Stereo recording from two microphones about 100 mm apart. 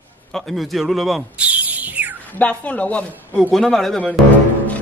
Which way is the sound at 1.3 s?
15° right (ahead or behind).